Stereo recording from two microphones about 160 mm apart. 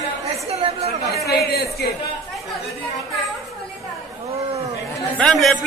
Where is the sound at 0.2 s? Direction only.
40° right (ahead or behind).